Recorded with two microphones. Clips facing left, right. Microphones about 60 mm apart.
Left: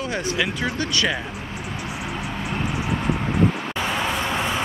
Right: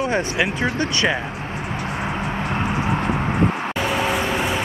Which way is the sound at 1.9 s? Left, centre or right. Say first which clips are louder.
Right 5 dB; right.